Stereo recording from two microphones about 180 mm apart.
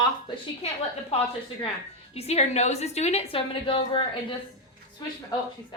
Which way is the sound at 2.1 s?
35° left (ahead or behind).